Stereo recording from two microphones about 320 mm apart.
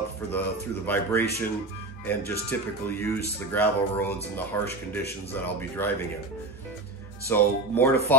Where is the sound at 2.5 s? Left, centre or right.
Centre.